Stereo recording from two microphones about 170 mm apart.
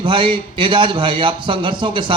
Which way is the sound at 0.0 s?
30° right (ahead or behind).